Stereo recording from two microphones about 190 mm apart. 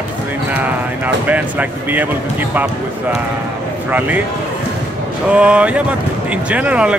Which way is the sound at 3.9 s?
10° right (ahead or behind).